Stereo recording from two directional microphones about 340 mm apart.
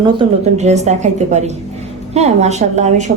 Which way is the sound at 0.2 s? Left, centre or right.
Centre.